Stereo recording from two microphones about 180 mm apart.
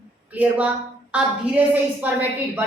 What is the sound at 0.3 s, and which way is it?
A woman's voice, 5° right (ahead or behind).